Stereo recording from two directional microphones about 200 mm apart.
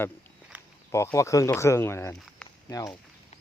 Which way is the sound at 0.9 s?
15° left (ahead or behind).